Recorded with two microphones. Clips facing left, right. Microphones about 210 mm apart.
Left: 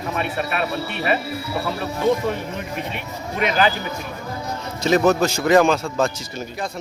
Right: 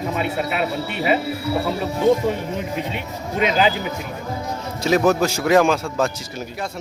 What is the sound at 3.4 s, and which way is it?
Speech, 20° right (ahead or behind).